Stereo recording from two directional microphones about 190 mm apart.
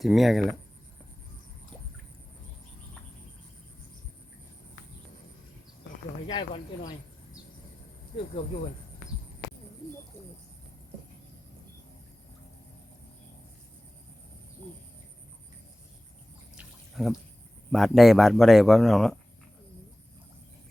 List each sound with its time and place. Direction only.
0.0 s speech: centre (ahead or behind)
6.2 s speech: 25° left (ahead or behind)
8.4 s speech: 35° left (ahead or behind)
16.6 s a sound: centre (ahead or behind)
17.7 s speech: centre (ahead or behind)